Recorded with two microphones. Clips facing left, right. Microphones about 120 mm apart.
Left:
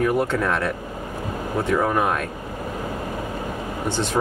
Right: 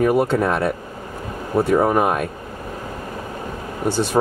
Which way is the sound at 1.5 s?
30° right (ahead or behind).